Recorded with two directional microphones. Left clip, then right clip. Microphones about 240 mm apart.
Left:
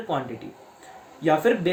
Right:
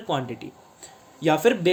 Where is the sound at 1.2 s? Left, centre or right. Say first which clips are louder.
Right 1 dB; right.